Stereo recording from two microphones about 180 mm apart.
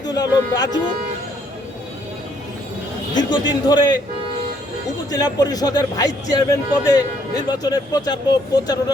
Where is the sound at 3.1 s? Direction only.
25° left (ahead or behind).